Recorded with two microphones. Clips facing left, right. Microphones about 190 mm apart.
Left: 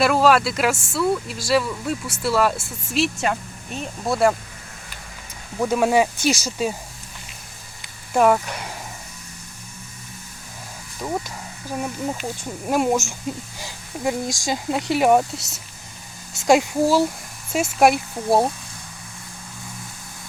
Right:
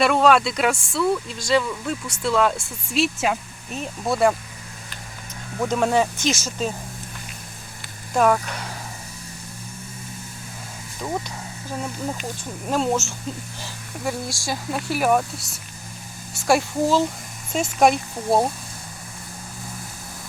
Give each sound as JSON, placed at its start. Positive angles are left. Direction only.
{"t": 0.0, "sound": "speech", "side_deg": 5}
{"t": 5.5, "sound": "speech", "side_deg": 10}
{"t": 8.1, "sound": "speech", "side_deg": 10}
{"t": 12.6, "sound": "speech", "side_deg": 10}